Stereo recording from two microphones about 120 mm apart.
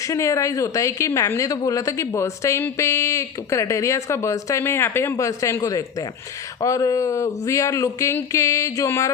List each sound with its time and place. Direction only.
0.1 s a woman's voice: 25° left (ahead or behind)